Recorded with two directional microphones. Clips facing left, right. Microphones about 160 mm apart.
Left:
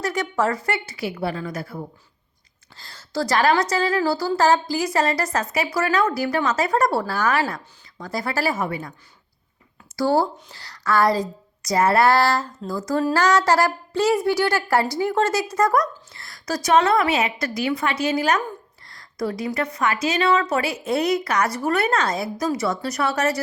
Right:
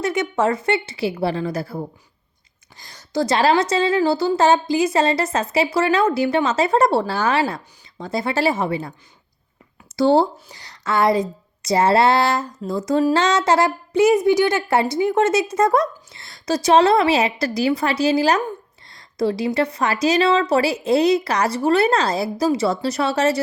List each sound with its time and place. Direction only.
0.0 s speech: 25° right (ahead or behind)
2.7 s speech: 15° right (ahead or behind)